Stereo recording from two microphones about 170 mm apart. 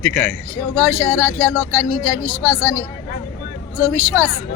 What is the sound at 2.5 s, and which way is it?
Speech, 10° left (ahead or behind).